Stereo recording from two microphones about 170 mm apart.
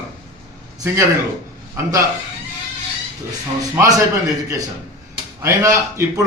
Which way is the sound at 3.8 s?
20° right (ahead or behind).